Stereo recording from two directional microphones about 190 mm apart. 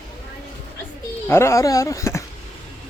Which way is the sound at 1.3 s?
15° left (ahead or behind).